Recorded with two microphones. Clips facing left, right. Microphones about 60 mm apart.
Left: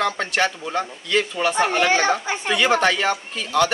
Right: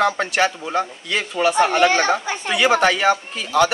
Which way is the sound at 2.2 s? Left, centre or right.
Left.